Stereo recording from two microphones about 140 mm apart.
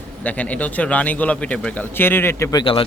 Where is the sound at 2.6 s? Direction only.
40° left (ahead or behind).